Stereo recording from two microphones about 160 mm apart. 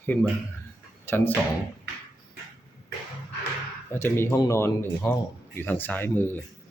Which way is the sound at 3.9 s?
15° left (ahead or behind).